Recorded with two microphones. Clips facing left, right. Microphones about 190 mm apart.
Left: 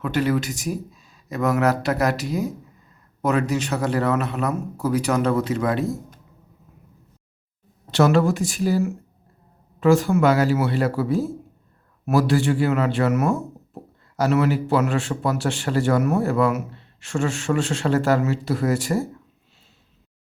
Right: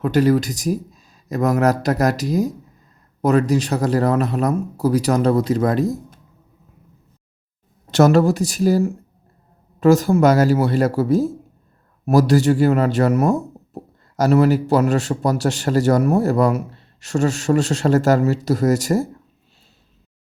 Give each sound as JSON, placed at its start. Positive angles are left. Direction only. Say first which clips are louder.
{"t": 0.0, "sound": "a man's voice", "louder": "right 6 dB", "side_deg": -40}
{"t": 7.9, "sound": "a man's voice", "louder": "right 4 dB", "side_deg": -45}